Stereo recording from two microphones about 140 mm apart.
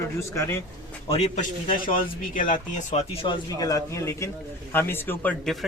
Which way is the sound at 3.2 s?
25° left (ahead or behind).